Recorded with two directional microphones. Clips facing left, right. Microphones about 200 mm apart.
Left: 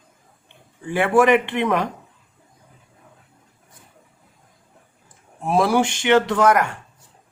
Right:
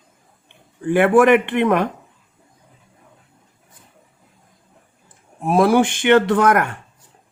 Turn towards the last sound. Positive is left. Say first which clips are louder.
# right 2 dB
turn(degrees=-55)  # may be behind; listen again after turning